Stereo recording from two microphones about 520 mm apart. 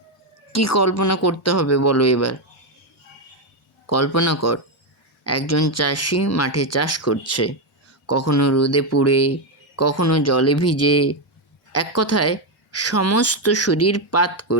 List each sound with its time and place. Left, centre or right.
0.5 s speech: left
3.8 s speech: left